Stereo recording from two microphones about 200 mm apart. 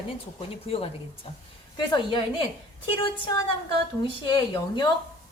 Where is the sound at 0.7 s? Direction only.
30° left (ahead or behind).